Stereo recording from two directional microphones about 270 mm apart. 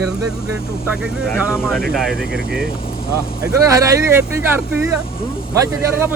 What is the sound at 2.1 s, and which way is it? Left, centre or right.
Speech, right.